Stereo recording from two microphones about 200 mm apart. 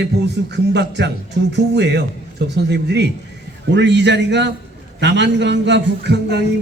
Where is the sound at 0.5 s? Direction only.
60° right (ahead or behind).